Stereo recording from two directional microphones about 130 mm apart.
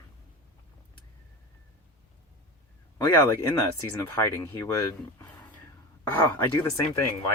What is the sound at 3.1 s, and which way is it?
Speech, 20° left (ahead or behind).